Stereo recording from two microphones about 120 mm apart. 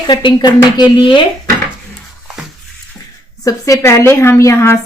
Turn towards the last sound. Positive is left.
turn(degrees=25)  # may be behind; listen again after turning